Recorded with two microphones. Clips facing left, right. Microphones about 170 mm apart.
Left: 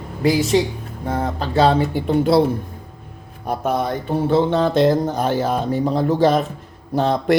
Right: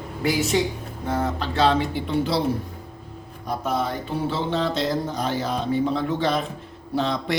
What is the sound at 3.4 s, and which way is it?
Speech, 55° left (ahead or behind).